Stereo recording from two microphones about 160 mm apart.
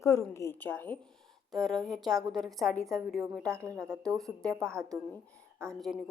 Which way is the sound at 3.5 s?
20° right (ahead or behind).